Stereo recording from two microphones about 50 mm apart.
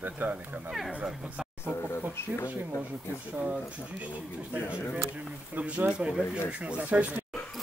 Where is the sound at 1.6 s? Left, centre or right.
Left.